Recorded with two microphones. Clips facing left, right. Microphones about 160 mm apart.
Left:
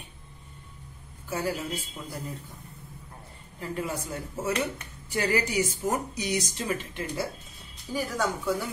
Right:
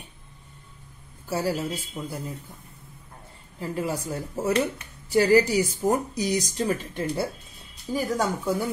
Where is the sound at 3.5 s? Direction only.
30° right (ahead or behind).